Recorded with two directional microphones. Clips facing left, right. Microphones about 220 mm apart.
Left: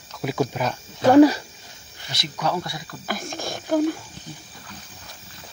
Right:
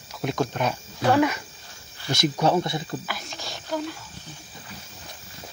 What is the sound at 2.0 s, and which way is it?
Speech, 50° right (ahead or behind).